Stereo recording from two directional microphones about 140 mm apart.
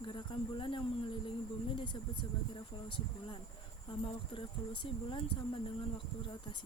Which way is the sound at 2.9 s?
40° left (ahead or behind).